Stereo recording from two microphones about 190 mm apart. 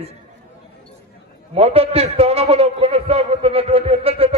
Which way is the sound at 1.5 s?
30° right (ahead or behind).